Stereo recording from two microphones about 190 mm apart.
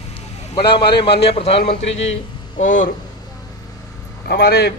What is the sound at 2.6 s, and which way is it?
Speech, 40° left (ahead or behind).